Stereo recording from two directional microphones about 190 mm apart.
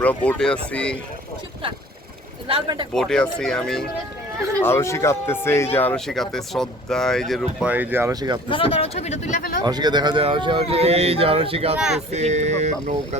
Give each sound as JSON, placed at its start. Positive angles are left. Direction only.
{"t": 0.0, "sound": "speech", "side_deg": 5}
{"t": 2.5, "sound": "speech", "side_deg": -25}
{"t": 2.9, "sound": "speech", "side_deg": 5}
{"t": 4.6, "sound": "speech", "side_deg": 15}
{"t": 8.4, "sound": "speech", "side_deg": 25}
{"t": 9.6, "sound": "speech", "side_deg": -20}